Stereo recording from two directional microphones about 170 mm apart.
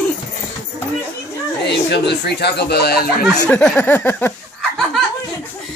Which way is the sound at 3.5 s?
10° left (ahead or behind).